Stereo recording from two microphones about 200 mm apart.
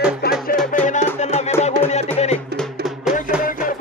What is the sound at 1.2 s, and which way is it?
Music, 35° left (ahead or behind).